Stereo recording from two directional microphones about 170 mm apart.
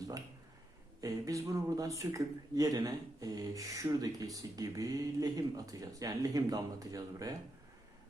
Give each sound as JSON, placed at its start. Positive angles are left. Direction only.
{"t": 1.0, "sound": "speech", "side_deg": -20}